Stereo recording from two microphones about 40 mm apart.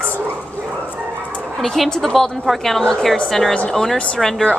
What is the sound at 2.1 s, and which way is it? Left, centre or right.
A woman's voice, centre.